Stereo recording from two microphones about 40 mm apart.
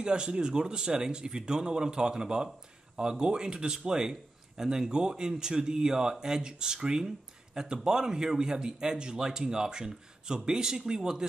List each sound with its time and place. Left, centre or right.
0.0 s a man's voice: right